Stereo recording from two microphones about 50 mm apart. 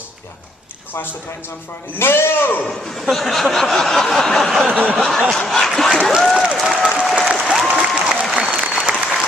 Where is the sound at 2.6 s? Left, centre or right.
Centre.